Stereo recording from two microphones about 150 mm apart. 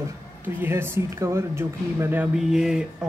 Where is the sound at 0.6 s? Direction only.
15° right (ahead or behind).